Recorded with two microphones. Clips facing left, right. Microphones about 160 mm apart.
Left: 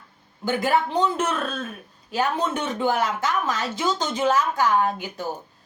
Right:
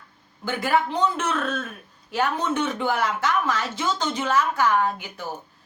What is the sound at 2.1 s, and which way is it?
Speech, 15° left (ahead or behind).